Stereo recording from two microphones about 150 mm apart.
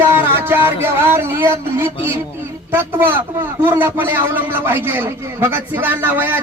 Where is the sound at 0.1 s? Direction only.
15° right (ahead or behind).